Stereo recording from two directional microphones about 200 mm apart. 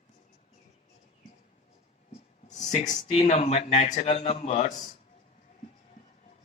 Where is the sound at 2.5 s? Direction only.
35° left (ahead or behind).